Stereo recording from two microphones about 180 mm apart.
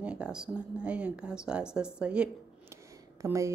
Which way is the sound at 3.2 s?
15° right (ahead or behind).